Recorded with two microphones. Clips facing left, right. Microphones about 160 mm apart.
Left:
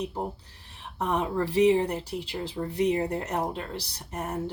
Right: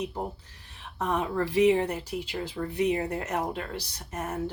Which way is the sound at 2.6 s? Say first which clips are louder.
Left 1 dB; 20° left (ahead or behind).